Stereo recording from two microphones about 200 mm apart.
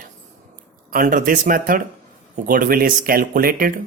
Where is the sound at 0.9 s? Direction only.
45° right (ahead or behind).